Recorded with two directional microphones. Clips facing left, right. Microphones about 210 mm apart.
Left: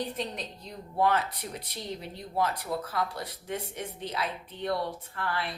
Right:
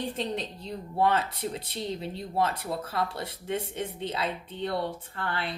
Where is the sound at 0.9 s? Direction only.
25° right (ahead or behind).